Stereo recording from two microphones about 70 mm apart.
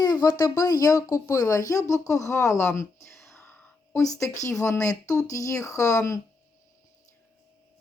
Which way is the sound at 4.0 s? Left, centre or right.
Left.